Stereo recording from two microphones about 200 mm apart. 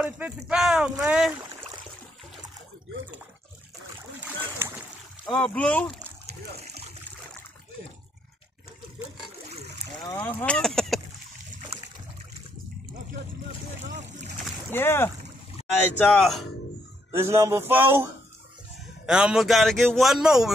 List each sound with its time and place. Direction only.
0.0 s speech: 5° right (ahead or behind)
4.2 s boat: 10° right (ahead or behind)
5.2 s speech: 5° left (ahead or behind)
10.0 s speech: 15° left (ahead or behind)
10.4 s speech: 5° left (ahead or behind)
13.8 s speech: 35° right (ahead or behind)
14.7 s speech: 10° left (ahead or behind)
17.1 s speech: 10° right (ahead or behind)